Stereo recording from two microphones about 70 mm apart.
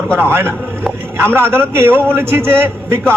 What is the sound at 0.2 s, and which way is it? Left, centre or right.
A man's voice, right.